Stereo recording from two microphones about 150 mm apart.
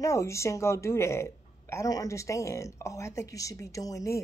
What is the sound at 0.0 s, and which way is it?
Speech, 20° left (ahead or behind).